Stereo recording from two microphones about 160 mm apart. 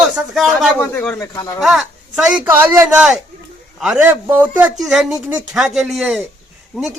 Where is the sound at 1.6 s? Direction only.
Centre (ahead or behind).